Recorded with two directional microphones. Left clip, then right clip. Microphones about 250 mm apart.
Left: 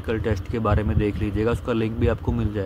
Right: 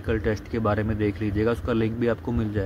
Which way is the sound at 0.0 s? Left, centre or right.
Centre.